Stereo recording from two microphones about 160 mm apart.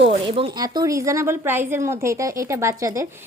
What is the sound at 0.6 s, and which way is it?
A woman's voice, 25° right (ahead or behind).